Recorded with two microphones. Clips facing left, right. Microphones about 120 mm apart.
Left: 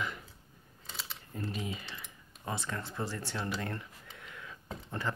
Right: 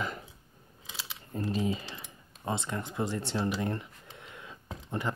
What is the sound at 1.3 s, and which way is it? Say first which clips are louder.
Typing: right 8 dB; 35° right (ahead or behind).